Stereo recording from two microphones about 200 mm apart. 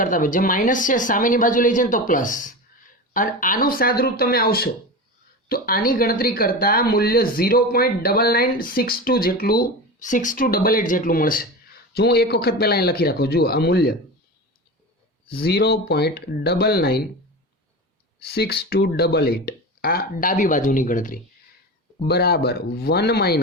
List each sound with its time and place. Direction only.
0.0 s speech: 40° left (ahead or behind)
15.4 s speech: 55° left (ahead or behind)
18.2 s speech: 50° left (ahead or behind)
22.0 s speech: 55° left (ahead or behind)